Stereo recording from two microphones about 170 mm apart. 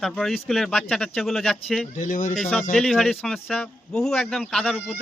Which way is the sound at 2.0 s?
50° left (ahead or behind).